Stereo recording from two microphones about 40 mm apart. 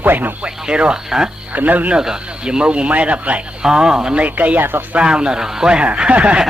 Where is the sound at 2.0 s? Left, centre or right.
Centre; by 3.4 s right.